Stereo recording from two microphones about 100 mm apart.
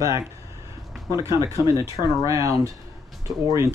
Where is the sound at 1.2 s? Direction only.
30° right (ahead or behind).